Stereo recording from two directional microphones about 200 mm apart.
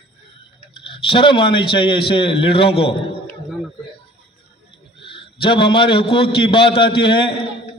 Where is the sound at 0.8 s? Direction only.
25° left (ahead or behind).